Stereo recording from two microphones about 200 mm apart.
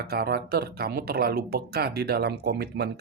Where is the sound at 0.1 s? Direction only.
50° right (ahead or behind).